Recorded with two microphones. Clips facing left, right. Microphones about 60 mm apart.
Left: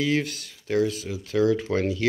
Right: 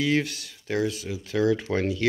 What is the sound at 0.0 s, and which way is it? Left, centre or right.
Speech, centre.